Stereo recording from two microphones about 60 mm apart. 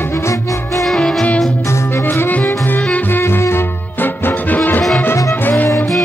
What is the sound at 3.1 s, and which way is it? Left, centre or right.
Music, left.